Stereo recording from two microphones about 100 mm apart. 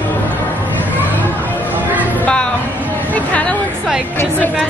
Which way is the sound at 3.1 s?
15° left (ahead or behind).